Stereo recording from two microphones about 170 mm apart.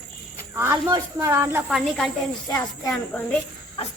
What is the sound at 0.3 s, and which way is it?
Speech, 10° right (ahead or behind).